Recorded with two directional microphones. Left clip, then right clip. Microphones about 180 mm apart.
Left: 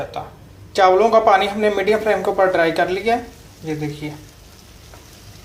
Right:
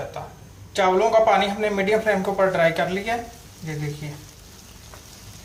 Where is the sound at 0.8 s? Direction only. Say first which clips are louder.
Left 5 dB; 30° left (ahead or behind).